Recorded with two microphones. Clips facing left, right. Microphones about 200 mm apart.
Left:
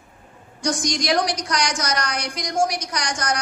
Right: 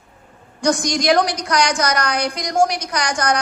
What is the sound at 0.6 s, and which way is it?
A woman's voice, 60° right (ahead or behind).